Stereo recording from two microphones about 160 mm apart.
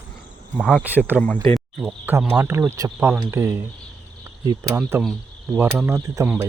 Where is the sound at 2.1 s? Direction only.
15° right (ahead or behind).